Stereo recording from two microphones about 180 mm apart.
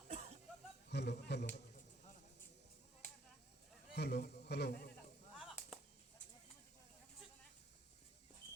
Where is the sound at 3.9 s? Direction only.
65° left (ahead or behind).